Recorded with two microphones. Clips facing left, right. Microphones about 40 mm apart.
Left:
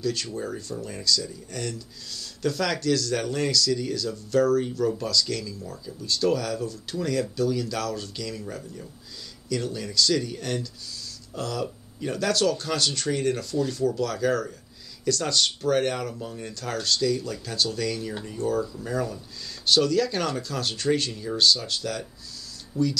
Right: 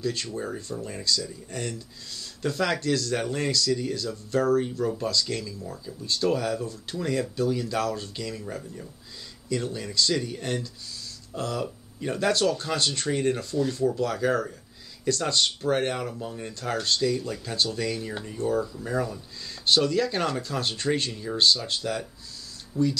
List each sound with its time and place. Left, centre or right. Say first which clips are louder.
0.0 s speech: left 1 dB; right
18.7 s speech: even; centre
21.6 s speech: right 1 dB; right
22.7 s speech: even; centre